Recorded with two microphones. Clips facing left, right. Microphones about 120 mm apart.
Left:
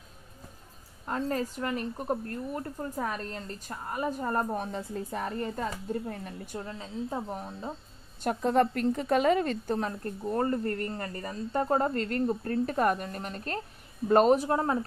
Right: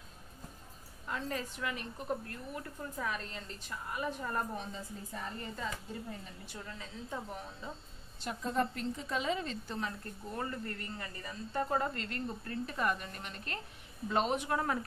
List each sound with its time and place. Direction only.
1.0 s a woman's voice: 40° left (ahead or behind); by 5.3 s 65° left (ahead or behind)
5.4 s speech: 55° left (ahead or behind); by 7.7 s 40° left (ahead or behind)
8.2 s a woman's voice: 60° left (ahead or behind); by 14.9 s 30° left (ahead or behind)